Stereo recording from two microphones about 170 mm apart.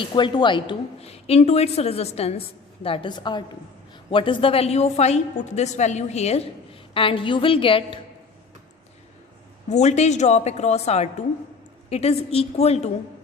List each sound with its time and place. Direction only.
0.0 s a woman's voice: 30° left (ahead or behind)
9.6 s a woman's voice: 45° left (ahead or behind)